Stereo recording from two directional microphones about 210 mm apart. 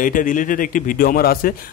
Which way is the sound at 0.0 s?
40° left (ahead or behind).